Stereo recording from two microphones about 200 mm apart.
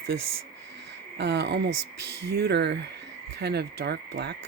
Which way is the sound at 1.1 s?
60° right (ahead or behind).